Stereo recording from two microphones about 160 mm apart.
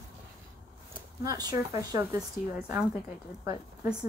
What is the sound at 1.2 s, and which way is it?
Speech, 20° right (ahead or behind).